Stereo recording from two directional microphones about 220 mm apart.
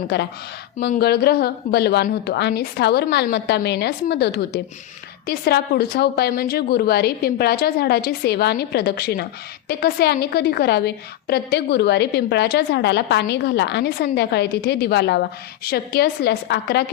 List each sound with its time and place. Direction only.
0.1 s a woman's voice: 50° left (ahead or behind)